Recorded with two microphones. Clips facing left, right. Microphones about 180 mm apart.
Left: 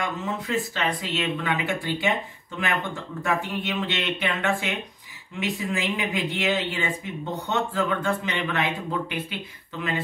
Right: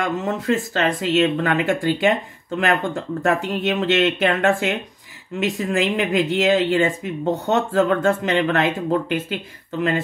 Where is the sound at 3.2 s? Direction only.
45° right (ahead or behind).